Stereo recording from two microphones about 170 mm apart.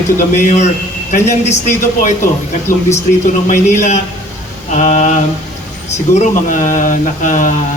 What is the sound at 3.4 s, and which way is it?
Speech, 45° left (ahead or behind).